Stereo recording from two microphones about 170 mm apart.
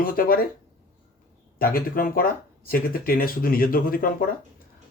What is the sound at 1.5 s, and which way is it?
Speech, 60° left (ahead or behind).